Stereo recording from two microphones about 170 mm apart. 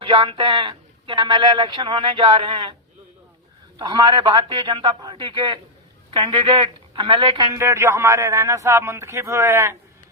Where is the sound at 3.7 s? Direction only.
25° right (ahead or behind).